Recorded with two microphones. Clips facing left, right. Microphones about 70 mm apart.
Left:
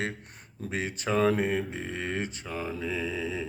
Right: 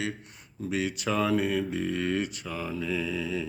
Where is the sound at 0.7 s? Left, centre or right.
Left.